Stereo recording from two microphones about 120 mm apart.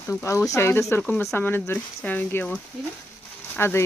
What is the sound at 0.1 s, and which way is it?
Speech, 25° left (ahead or behind).